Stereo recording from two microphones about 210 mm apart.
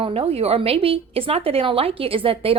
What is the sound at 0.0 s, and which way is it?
A woman's voice, 30° right (ahead or behind).